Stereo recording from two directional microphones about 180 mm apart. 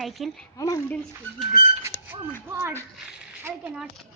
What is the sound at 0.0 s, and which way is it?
Speech, centre (ahead or behind).